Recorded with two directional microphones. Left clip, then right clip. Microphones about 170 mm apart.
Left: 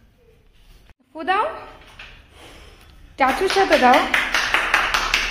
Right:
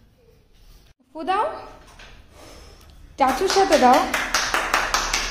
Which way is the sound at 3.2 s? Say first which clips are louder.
Left 1 dB; 5° right (ahead or behind).